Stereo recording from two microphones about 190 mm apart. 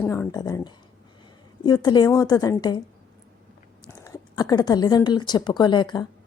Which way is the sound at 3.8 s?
20° left (ahead or behind).